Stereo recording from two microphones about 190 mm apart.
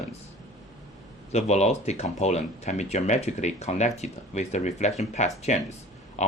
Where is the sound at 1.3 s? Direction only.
35° left (ahead or behind).